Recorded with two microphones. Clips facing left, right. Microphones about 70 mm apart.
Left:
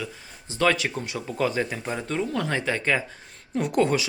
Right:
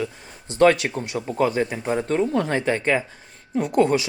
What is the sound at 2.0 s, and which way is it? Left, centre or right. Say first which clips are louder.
Speech: right 6 dB; right.